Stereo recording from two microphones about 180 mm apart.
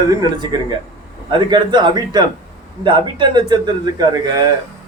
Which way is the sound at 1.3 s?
25° right (ahead or behind).